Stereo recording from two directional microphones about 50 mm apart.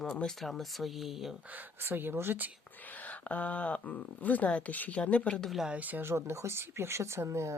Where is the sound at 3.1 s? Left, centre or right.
Left.